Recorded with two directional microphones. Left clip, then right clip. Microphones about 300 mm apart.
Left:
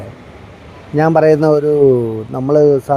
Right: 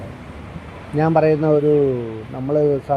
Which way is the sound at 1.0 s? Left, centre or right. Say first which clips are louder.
Left 6 dB; left.